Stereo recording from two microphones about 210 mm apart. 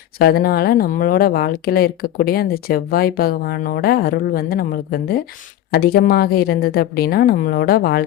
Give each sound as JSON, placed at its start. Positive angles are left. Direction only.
{"t": 0.2, "sound": "speech", "side_deg": 45}